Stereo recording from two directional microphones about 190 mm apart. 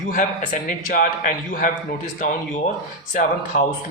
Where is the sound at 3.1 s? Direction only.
45° left (ahead or behind).